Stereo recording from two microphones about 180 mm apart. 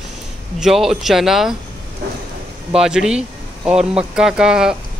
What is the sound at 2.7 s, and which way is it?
Speech, 5° right (ahead or behind).